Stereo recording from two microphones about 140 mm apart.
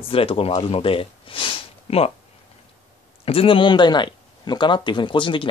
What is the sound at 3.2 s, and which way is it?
Speech, 40° left (ahead or behind).